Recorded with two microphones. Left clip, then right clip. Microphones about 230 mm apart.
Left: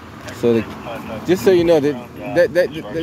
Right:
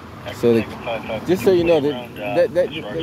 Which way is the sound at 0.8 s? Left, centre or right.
Right.